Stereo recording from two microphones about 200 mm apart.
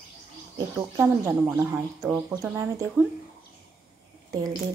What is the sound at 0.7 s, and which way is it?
Speech, 15° right (ahead or behind).